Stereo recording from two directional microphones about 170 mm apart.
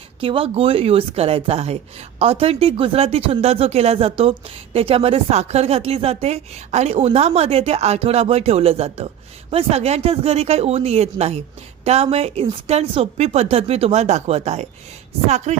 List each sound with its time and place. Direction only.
0.2 s speech: 30° right (ahead or behind)
15.5 s chopping: 40° right (ahead or behind)